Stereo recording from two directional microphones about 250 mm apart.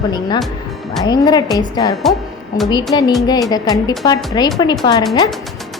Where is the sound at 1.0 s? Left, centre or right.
Centre.